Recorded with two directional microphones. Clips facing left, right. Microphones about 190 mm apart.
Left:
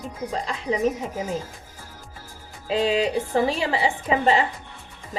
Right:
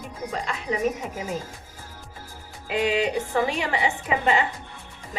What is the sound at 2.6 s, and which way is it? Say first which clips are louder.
A woman's voice: left 2 dB; 30° left (ahead or behind).